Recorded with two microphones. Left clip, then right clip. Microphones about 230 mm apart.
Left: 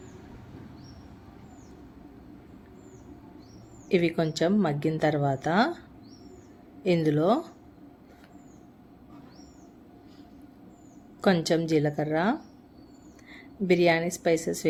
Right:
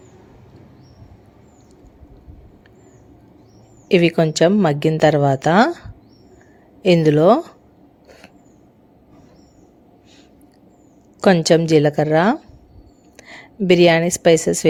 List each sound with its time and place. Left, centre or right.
3.8 s a woman's voice: right
6.8 s a woman's voice: right
11.2 s a woman's voice: right